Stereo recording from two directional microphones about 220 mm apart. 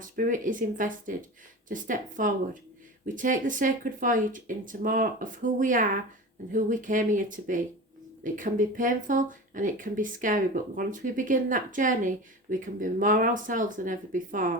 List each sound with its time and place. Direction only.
0.0 s speech: 35° right (ahead or behind)